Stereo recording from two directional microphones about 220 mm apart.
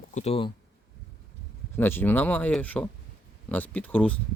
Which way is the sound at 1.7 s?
10° left (ahead or behind).